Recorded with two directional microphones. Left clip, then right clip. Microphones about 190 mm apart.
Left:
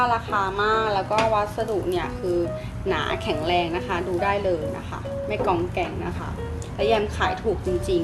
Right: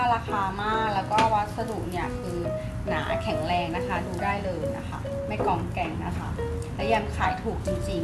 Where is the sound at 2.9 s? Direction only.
55° left (ahead or behind).